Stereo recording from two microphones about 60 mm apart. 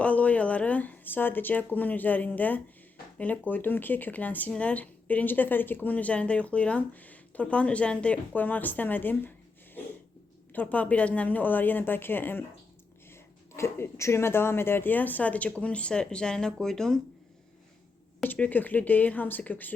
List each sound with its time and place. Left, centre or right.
0.0 s a woman's voice: left
10.5 s a woman's voice: left; by 17.0 s centre
18.2 s a woman's voice: left